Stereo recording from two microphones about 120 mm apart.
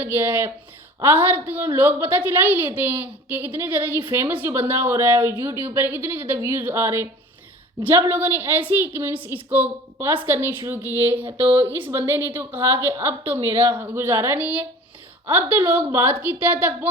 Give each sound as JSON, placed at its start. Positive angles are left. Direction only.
{"t": 0.0, "sound": "a woman's voice", "side_deg": -15}